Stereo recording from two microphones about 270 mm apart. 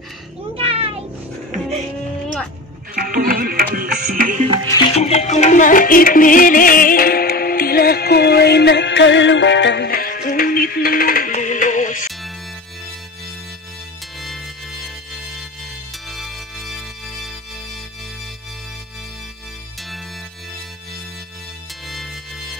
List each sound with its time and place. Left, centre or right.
0.6 s a sound: right
2.9 s music: right
4.6 s music: centre
14.2 s music: centre
16.1 s music: centre
21.8 s music: centre